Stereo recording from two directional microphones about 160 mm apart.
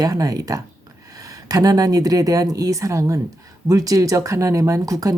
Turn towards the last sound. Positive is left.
turn(degrees=-20)  # may be behind; listen again after turning